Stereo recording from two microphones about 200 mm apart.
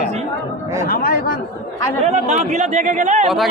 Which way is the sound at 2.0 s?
35° right (ahead or behind).